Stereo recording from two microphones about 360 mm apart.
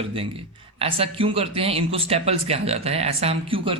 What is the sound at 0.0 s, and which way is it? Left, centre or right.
A man's voice, centre.